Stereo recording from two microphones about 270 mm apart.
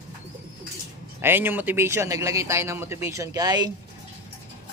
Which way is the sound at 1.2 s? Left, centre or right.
Centre.